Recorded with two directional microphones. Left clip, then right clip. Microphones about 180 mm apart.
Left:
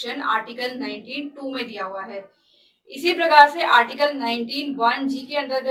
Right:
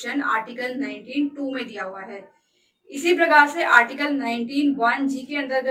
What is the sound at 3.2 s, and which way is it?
A woman's voice, 15° right (ahead or behind).